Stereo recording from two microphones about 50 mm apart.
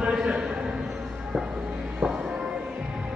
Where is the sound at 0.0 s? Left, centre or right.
Centre.